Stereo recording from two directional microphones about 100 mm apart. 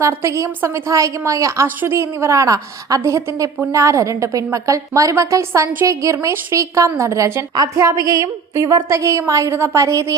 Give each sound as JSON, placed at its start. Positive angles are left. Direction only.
{"t": 0.0, "sound": "a woman's voice", "side_deg": -25}